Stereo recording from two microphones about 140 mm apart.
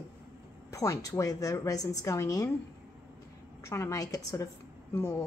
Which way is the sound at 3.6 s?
20° left (ahead or behind).